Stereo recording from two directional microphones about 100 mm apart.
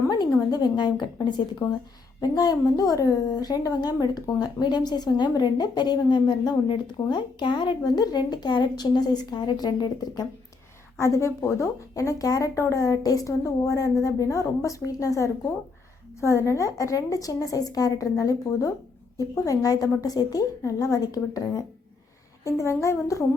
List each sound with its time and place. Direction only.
0.5 s a woman's voice: 45° left (ahead or behind)
2.3 s a woman's voice: 35° left (ahead or behind)
11.0 s speech: 30° left (ahead or behind)